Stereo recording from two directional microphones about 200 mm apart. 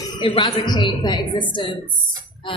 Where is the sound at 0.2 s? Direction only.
30° left (ahead or behind).